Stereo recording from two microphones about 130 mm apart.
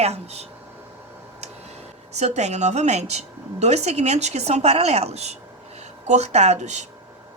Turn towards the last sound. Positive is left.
turn(degrees=-65)  # may be behind; listen again after turning